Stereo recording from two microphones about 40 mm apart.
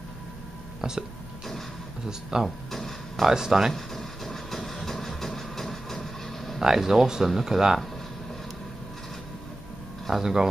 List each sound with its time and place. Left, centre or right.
0.7 s speech: centre
2.0 s speech: centre
2.7 s a sound: centre
3.3 s speech: centre
3.7 s music: centre
6.6 s speech: centre
10.1 s speech: centre